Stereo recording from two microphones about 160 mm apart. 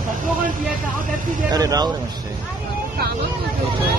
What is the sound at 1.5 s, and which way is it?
Speech, 25° right (ahead or behind).